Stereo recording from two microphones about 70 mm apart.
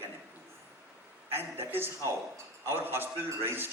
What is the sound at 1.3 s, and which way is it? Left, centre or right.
A man's voice, right.